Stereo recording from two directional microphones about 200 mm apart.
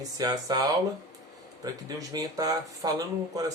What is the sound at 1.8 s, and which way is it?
Speech, 20° right (ahead or behind).